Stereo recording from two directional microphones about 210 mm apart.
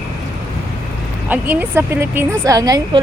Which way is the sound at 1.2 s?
10° right (ahead or behind).